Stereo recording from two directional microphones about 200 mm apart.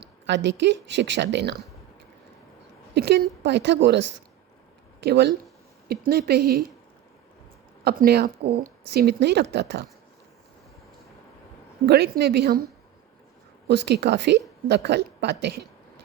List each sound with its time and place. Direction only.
0.0 s a woman's voice: 60° right (ahead or behind)
2.9 s a woman's voice: 55° right (ahead or behind)
5.0 s a woman's voice: 55° right (ahead or behind)
7.9 s a woman's voice: 50° right (ahead or behind)
11.9 s a woman's voice: 55° right (ahead or behind)
13.7 s a woman's voice: 55° right (ahead or behind)